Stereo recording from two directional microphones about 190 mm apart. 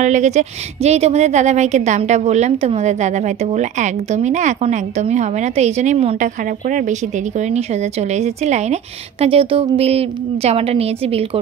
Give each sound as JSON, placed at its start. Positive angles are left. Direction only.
{"t": 0.0, "sound": "a woman's voice", "side_deg": -40}